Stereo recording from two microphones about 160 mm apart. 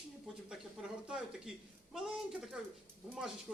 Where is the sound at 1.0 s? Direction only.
5° right (ahead or behind).